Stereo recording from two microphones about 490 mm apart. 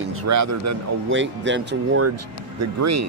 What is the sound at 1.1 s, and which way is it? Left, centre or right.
A man's voice, right.